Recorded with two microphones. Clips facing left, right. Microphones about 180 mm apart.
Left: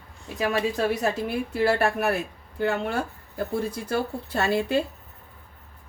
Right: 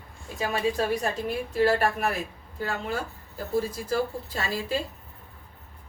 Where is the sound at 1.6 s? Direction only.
70° left (ahead or behind).